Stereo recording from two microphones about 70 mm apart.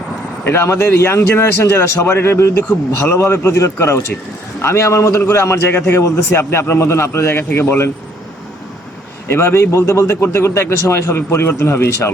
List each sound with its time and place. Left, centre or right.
0.4 s a man's voice: left
9.2 s a man's voice: left